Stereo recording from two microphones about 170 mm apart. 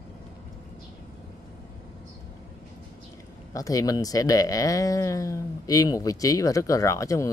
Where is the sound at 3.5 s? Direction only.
20° left (ahead or behind).